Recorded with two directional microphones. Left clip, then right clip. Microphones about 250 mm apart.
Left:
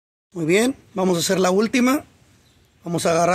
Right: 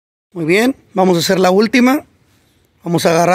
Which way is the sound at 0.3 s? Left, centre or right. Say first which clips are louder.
Right 5 dB; right.